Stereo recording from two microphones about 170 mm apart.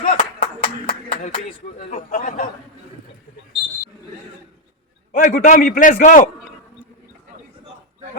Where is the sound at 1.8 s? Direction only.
50° left (ahead or behind).